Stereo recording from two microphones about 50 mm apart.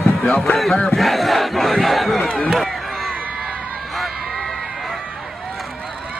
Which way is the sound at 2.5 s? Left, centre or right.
Centre.